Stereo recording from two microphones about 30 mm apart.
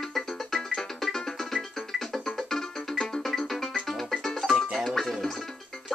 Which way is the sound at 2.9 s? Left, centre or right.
Left.